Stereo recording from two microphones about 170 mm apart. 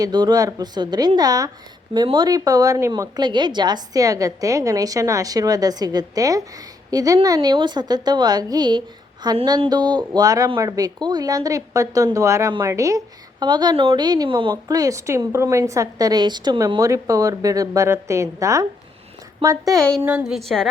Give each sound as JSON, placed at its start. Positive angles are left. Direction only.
{"t": 0.0, "sound": "a woman's voice", "side_deg": -25}
{"t": 20.0, "sound": "a woman's voice", "side_deg": -10}